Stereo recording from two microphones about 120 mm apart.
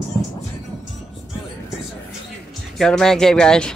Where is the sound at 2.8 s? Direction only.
5° left (ahead or behind).